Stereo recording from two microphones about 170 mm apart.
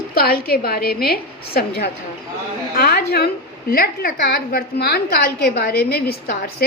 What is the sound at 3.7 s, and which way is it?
A woman's voice, 60° left (ahead or behind).